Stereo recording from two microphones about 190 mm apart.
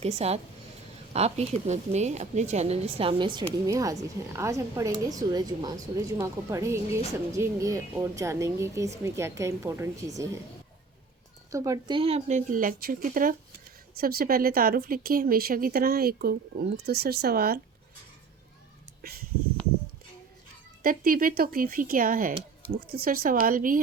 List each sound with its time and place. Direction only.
0.0 s a woman's voice: 35° right (ahead or behind); by 10.3 s 15° right (ahead or behind)
11.5 s a woman's voice: 15° right (ahead or behind); by 17.6 s 55° right (ahead or behind)
20.8 s speech: 45° right (ahead or behind)